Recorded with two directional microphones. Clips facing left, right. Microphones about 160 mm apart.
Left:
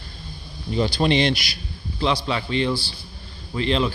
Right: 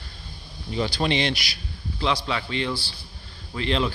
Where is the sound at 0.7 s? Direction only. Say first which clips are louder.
Left 4 dB; 35° left (ahead or behind).